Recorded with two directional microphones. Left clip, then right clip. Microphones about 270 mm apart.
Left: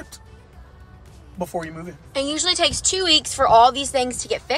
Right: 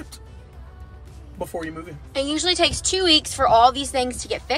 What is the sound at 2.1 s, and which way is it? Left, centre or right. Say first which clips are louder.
Speech: even; centre.